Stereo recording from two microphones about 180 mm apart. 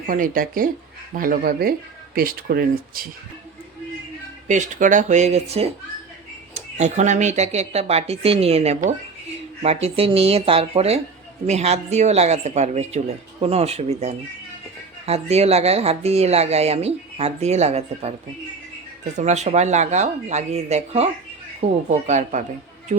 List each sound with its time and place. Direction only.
0.1 s speech: 50° right (ahead or behind)
4.4 s speech: 45° right (ahead or behind)
19.1 s speech: 40° right (ahead or behind)